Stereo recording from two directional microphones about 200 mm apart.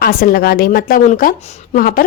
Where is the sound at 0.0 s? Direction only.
50° left (ahead or behind).